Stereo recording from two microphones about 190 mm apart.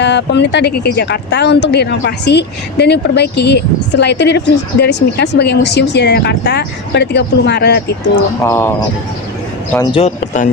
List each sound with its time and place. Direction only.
0.0 s speech: 65° left (ahead or behind)
8.4 s speech: 15° left (ahead or behind)
9.8 s speech: 25° left (ahead or behind)
10.2 s speech: 40° left (ahead or behind)